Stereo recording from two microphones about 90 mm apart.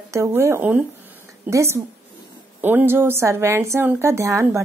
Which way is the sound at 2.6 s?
20° right (ahead or behind).